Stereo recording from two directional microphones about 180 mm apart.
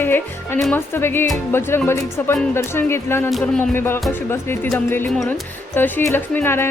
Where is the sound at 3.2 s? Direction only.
Centre (ahead or behind).